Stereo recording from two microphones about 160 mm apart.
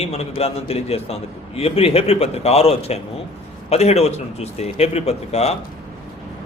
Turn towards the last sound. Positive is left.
turn(degrees=40)  # may be behind; listen again after turning